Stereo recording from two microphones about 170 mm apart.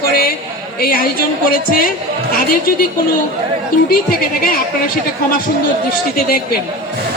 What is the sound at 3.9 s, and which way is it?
Speech, 60° left (ahead or behind).